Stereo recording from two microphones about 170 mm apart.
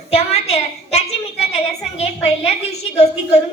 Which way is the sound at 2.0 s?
40° left (ahead or behind).